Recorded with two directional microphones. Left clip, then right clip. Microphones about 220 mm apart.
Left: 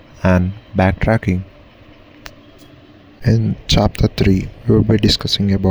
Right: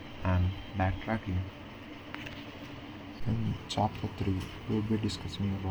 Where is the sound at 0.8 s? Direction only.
50° left (ahead or behind).